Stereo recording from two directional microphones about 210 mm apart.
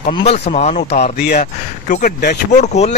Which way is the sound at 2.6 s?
30° left (ahead or behind).